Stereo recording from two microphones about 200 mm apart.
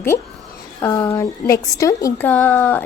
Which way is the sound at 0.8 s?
15° left (ahead or behind).